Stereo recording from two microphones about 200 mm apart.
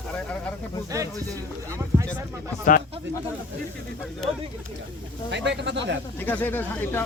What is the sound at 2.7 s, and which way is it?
Speech, 40° left (ahead or behind).